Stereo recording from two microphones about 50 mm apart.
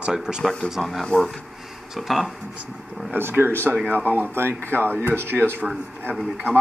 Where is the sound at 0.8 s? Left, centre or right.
Centre.